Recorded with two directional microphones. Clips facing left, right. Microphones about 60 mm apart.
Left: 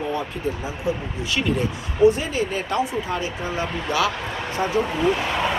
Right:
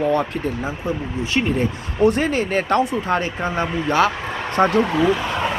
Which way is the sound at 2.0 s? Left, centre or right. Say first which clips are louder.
Right 1 dB; right.